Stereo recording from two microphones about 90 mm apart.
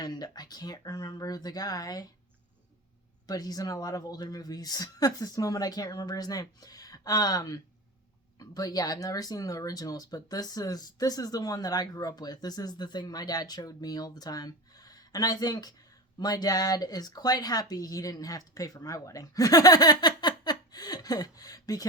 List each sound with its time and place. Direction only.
0.0 s speech: 50° left (ahead or behind)
3.2 s speech: 45° left (ahead or behind)